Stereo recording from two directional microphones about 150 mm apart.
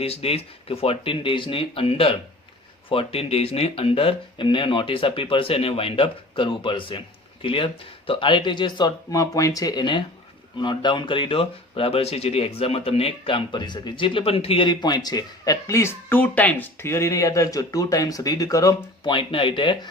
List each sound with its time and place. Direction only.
0.0 s speech: 40° left (ahead or behind); by 19.1 s 25° left (ahead or behind)
19.1 s speech: 35° left (ahead or behind)